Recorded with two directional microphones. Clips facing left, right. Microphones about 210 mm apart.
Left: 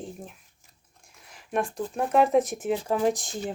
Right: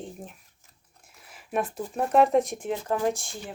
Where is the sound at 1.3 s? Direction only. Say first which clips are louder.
Left 1 dB; 5° right (ahead or behind); by 3.5 s 20° left (ahead or behind).